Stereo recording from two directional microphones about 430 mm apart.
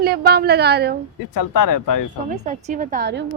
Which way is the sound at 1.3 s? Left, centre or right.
Left.